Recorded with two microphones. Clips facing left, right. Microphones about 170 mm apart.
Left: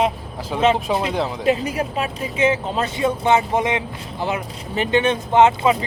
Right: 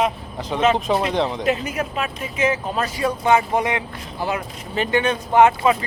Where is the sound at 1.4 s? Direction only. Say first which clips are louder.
Left 2 dB; 30° left (ahead or behind).